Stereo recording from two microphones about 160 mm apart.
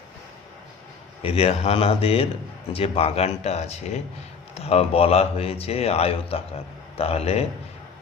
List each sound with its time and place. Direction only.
1.2 s a man's voice: 40° left (ahead or behind)